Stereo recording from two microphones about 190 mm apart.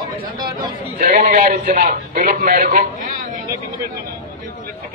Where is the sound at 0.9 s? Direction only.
40° right (ahead or behind).